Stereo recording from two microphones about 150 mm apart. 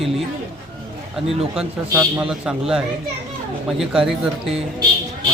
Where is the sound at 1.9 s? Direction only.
20° right (ahead or behind).